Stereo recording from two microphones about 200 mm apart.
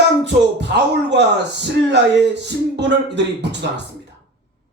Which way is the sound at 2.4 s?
60° right (ahead or behind).